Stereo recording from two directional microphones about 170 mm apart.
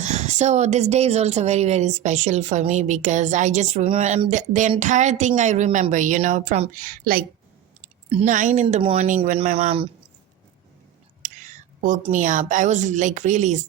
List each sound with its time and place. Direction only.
0.0 s a woman's voice: 40° right (ahead or behind)
6.8 s a woman's voice: 55° right (ahead or behind)
8.1 s a woman's voice: 45° right (ahead or behind)
8.6 s speech: 30° right (ahead or behind)
9.0 s a woman's voice: 50° right (ahead or behind)
11.2 s a sound: 50° right (ahead or behind)
12.1 s a woman's voice: 50° right (ahead or behind)